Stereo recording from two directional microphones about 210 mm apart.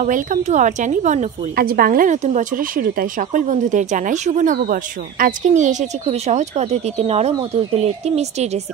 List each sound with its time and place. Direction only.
0.0 s a woman's voice: 35° right (ahead or behind)